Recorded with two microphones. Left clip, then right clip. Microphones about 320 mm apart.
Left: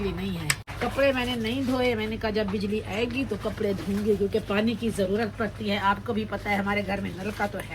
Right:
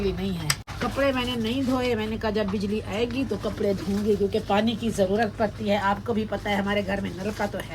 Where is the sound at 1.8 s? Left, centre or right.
Right.